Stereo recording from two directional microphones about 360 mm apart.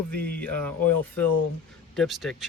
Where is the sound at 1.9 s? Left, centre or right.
Centre.